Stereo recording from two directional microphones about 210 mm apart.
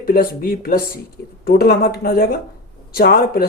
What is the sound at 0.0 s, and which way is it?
Speech, 45° left (ahead or behind).